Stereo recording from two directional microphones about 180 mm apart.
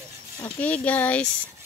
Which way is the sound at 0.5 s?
10° left (ahead or behind).